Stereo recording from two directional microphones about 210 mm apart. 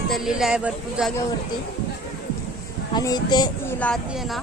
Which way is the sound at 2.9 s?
20° left (ahead or behind).